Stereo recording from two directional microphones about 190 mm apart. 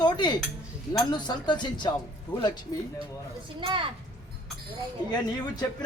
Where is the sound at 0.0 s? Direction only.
20° left (ahead or behind).